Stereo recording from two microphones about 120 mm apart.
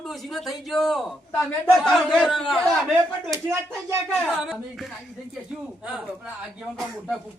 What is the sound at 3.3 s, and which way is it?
Speech, 20° right (ahead or behind).